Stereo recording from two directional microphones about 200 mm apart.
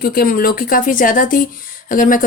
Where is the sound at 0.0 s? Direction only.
50° left (ahead or behind).